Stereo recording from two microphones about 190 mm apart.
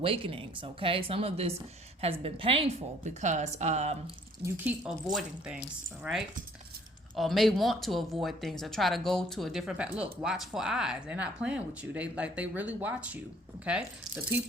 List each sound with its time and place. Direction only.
0.0 s a woman's voice: 30° right (ahead or behind)
4.5 s speech: 10° right (ahead or behind)
6.0 s speech: centre (ahead or behind)